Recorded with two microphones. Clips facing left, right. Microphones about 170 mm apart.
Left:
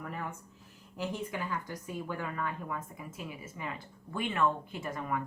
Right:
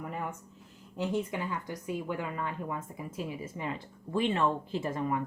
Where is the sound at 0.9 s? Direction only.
20° right (ahead or behind).